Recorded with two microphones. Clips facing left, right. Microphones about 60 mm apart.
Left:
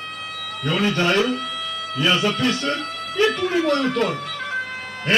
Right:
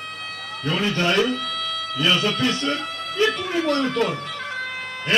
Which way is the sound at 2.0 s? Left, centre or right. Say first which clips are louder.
Left 1 dB; centre.